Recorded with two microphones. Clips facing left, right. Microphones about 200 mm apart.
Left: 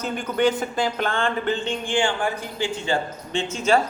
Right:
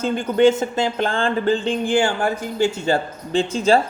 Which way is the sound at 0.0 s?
25° right (ahead or behind).